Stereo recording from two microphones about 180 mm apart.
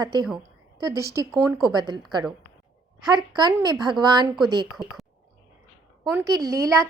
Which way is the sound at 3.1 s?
25° right (ahead or behind).